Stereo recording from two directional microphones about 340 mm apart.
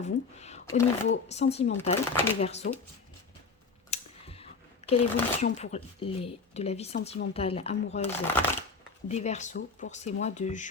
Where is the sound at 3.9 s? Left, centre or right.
Centre.